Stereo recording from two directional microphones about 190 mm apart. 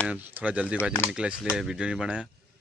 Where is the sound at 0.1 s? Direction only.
10° right (ahead or behind).